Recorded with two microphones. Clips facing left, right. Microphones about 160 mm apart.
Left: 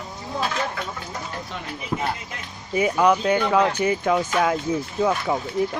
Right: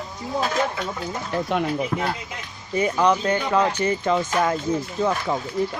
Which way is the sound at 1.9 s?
15° left (ahead or behind).